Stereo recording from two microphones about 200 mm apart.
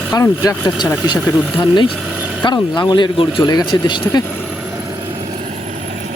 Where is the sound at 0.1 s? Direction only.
20° left (ahead or behind).